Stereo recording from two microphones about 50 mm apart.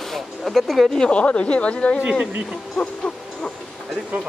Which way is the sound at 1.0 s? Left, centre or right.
Left.